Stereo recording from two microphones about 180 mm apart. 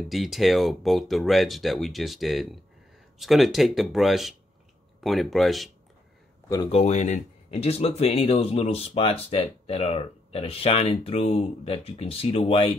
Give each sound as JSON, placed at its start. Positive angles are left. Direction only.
{"t": 0.1, "sound": "speech", "side_deg": 0}
{"t": 6.7, "sound": "speech", "side_deg": 40}